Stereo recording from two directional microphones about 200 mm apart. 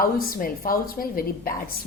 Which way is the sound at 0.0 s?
45° left (ahead or behind).